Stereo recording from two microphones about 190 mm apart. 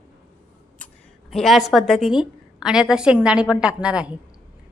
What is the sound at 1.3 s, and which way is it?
A woman's voice, centre (ahead or behind).